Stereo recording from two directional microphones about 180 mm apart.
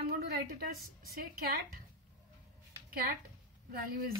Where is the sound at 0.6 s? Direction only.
55° right (ahead or behind).